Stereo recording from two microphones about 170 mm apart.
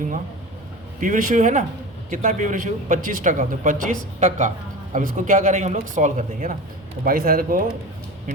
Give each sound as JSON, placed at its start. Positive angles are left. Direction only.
{"t": 0.9, "sound": "speech", "side_deg": -50}